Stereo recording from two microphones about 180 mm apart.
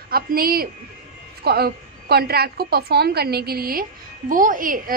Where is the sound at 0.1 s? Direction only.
55° right (ahead or behind).